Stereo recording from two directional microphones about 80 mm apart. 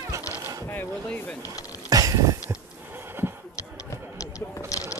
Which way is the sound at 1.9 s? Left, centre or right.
Right.